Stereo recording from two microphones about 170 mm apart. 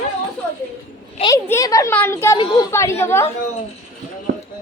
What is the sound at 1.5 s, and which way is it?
A woman's voice, 20° left (ahead or behind).